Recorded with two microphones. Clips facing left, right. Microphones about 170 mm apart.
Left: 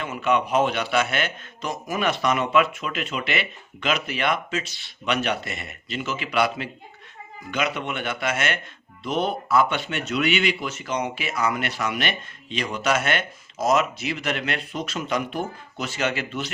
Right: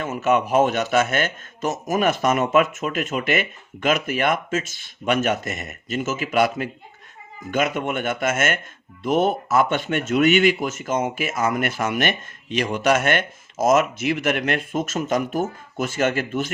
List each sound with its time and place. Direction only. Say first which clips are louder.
0.0 s speech: right 3 dB; 45° right (ahead or behind)